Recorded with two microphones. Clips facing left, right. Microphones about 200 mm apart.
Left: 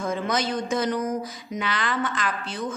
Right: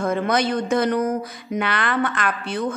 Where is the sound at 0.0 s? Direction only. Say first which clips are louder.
Right 5 dB; 60° right (ahead or behind).